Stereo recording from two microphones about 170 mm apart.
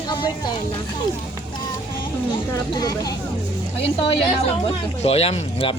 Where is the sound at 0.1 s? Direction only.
25° left (ahead or behind).